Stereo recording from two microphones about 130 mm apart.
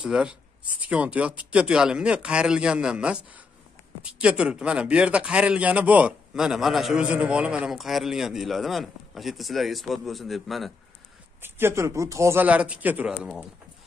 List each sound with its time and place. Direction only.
0.0 s a man's voice: 5° right (ahead or behind)
11.4 s speech: 15° right (ahead or behind)